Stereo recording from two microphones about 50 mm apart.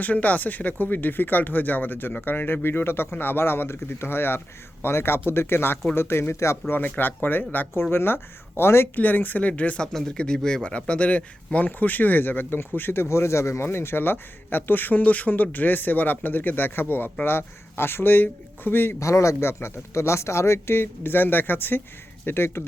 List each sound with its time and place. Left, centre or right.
0.0 s speech: left
6.7 s speech: left
7.8 s speech: left
9.0 s speech: left
9.8 s speech: centre; by 18.9 s left
18.9 s speech: left
19.5 s speech: left
22.3 s speech: left